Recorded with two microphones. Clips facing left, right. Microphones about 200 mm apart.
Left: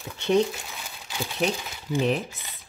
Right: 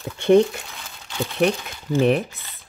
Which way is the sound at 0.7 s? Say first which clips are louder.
Even; 5° left (ahead or behind).